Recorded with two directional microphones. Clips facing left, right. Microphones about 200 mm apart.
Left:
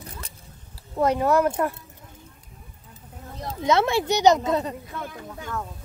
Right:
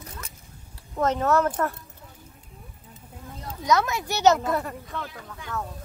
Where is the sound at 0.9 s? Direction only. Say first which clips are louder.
Left 2 dB; 15° left (ahead or behind).